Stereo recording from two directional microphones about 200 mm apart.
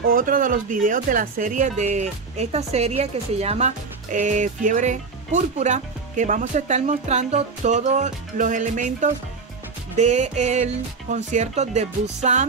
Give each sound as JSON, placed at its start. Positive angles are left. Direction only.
{"t": 0.1, "sound": "speech", "side_deg": -45}